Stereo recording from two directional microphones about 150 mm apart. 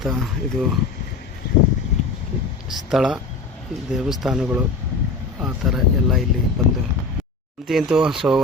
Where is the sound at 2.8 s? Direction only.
5° right (ahead or behind).